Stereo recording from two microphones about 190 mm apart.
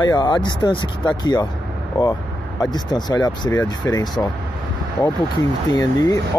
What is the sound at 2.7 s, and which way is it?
Speech, 20° left (ahead or behind).